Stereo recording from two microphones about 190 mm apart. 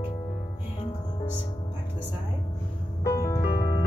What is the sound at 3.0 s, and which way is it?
Music, 15° left (ahead or behind).